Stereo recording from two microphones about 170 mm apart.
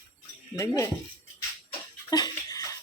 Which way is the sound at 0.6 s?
20° left (ahead or behind).